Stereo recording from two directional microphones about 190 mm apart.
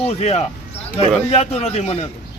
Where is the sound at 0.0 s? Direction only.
35° left (ahead or behind).